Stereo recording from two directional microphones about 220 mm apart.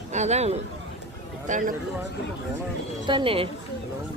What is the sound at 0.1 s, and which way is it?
Speech, 30° right (ahead or behind).